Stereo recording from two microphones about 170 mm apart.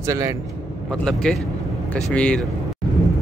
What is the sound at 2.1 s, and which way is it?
Speech, 5° left (ahead or behind).